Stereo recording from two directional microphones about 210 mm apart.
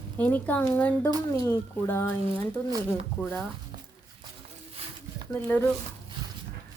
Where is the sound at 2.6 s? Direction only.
20° right (ahead or behind).